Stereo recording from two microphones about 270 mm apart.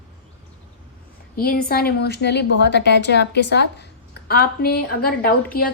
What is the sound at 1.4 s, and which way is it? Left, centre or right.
Speech, left.